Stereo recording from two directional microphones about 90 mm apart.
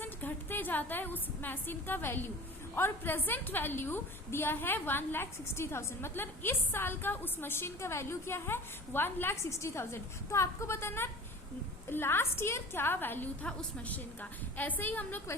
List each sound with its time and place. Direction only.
0.0 s a woman's voice: 20° left (ahead or behind)